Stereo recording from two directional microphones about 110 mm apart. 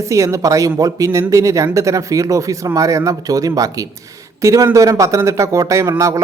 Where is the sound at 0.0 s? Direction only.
30° right (ahead or behind).